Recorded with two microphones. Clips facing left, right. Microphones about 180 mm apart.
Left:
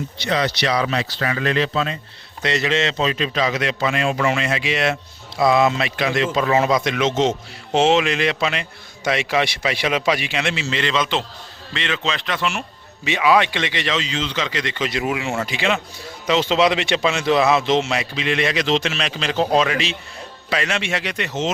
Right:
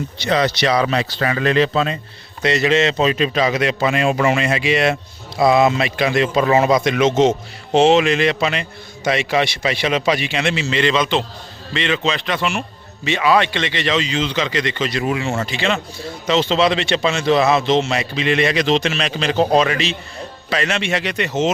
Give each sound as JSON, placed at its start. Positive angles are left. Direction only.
{"t": 0.3, "sound": "a man's voice", "side_deg": -50}
{"t": 2.4, "sound": "a man's voice", "side_deg": -5}
{"t": 14.9, "sound": "speech", "side_deg": 15}